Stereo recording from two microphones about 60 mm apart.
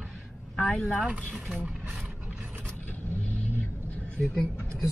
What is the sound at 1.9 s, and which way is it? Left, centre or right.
Mechanisms, centre.